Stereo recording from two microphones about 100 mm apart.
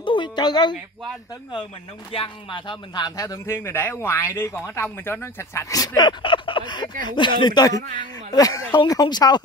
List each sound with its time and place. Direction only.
0.0 s a sound: 55° left (ahead or behind)
2.1 s speech: 55° left (ahead or behind); by 3.5 s 35° left (ahead or behind)
3.5 s speech: 20° left (ahead or behind); by 9.4 s 45° left (ahead or behind)